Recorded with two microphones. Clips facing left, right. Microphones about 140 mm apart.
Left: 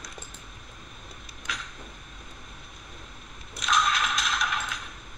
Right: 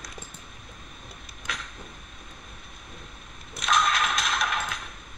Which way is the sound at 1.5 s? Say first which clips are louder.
Right 1 dB; 55° right (ahead or behind).